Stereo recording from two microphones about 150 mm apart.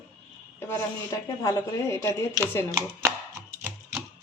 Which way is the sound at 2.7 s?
20° right (ahead or behind).